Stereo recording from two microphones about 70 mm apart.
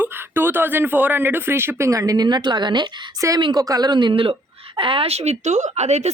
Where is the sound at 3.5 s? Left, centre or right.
Right.